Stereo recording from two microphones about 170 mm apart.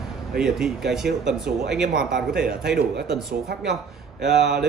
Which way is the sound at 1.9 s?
60° right (ahead or behind).